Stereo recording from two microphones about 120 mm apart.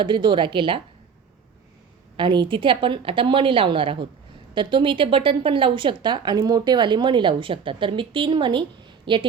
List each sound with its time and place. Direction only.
0.0 s speech: 45° right (ahead or behind)
2.1 s speech: 45° right (ahead or behind)